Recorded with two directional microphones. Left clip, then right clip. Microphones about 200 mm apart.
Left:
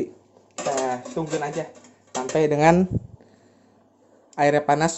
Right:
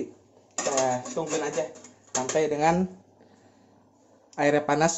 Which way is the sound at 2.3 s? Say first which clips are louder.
Left 6 dB; 50° left (ahead or behind).